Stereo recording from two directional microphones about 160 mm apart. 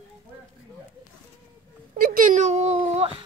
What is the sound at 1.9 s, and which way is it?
Speech, 60° right (ahead or behind).